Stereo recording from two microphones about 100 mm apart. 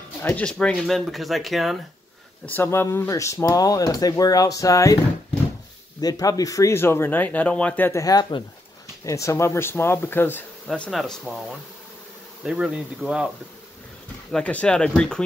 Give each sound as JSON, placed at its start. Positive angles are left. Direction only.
{"t": 0.2, "sound": "speech", "side_deg": 20}
{"t": 0.5, "sound": "speech", "side_deg": 10}
{"t": 2.4, "sound": "speech", "side_deg": 20}
{"t": 5.9, "sound": "speech", "side_deg": 40}
{"t": 8.0, "sound": "speech", "side_deg": 45}
{"t": 9.0, "sound": "speech", "side_deg": 30}
{"t": 10.9, "sound": "speech", "side_deg": 0}
{"t": 12.4, "sound": "speech", "side_deg": -10}
{"t": 14.3, "sound": "speech", "side_deg": 10}